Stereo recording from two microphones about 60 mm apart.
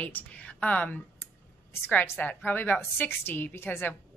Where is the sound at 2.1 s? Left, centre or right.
Left.